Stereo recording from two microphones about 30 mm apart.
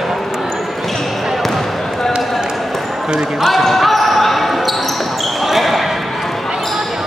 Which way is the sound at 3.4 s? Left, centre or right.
Centre.